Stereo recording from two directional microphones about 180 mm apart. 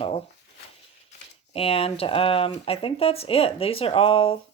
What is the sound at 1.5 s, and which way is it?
Speech, 30° left (ahead or behind).